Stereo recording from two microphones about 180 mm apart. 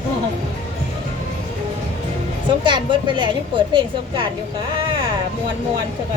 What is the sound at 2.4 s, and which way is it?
Speech, 25° right (ahead or behind).